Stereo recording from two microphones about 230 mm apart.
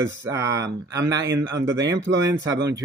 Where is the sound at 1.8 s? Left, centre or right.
Right.